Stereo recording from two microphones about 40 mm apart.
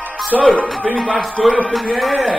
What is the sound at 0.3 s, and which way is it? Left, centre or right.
A man's voice, centre.